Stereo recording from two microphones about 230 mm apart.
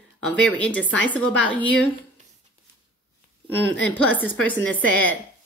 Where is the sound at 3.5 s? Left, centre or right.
Centre.